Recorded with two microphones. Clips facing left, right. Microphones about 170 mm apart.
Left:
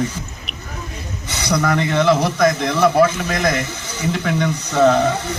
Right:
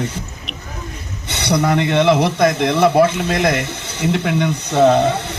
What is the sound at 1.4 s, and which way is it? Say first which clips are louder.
A man's voice: right 2 dB; 25° right (ahead or behind).